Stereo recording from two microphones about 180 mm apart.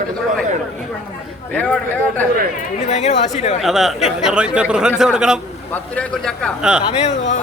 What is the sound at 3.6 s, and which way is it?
Speech, centre (ahead or behind).